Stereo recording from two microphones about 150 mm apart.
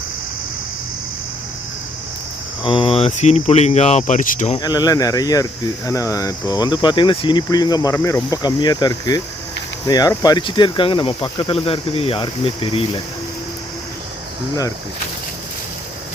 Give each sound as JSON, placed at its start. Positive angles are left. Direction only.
{"t": 2.6, "sound": "speech", "side_deg": 35}
{"t": 4.6, "sound": "speech", "side_deg": 25}